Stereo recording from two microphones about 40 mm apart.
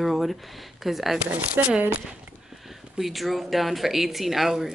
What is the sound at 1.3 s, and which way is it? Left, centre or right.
Speech, right.